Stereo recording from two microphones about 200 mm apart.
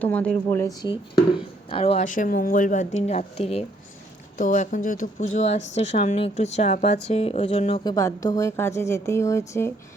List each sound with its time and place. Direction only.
0.0 s a woman's voice: 5° left (ahead or behind)
1.7 s speech: 30° left (ahead or behind)
7.9 s a woman's voice: 15° left (ahead or behind)